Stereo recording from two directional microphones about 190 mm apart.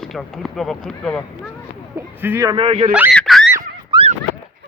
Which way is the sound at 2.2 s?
15° right (ahead or behind).